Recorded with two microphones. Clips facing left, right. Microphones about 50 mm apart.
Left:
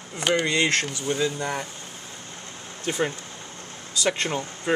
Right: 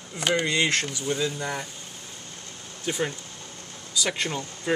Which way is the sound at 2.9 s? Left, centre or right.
Centre.